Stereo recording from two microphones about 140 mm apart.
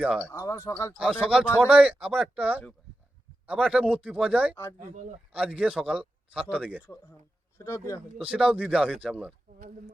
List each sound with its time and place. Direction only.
0.0 s speech: 5° right (ahead or behind)
0.3 s speech: 20° left (ahead or behind)
0.9 s speech: 5° right (ahead or behind)
7.6 s speech: 20° left (ahead or behind)
8.2 s speech: 5° right (ahead or behind)